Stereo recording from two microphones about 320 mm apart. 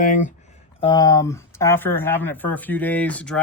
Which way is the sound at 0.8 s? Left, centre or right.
Centre.